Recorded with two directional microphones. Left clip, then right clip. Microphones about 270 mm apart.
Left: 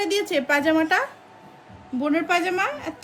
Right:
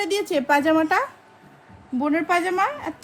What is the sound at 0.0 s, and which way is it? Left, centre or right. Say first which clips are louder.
Speech: even; right.